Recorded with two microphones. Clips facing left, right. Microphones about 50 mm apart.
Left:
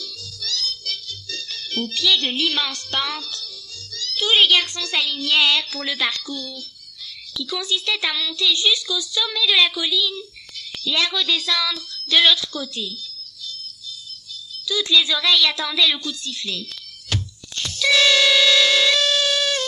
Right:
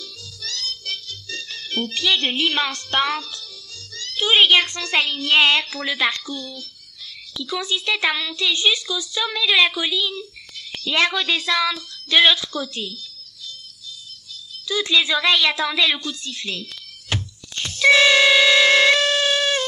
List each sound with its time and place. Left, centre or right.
0.0 s music: right
3.9 s speech: right
7.5 s speech: right
12.7 s speech: right
14.6 s a woman's voice: right
17.1 s music: right